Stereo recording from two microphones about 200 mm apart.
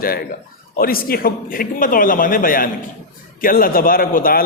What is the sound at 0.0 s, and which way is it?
A man's voice, 45° left (ahead or behind).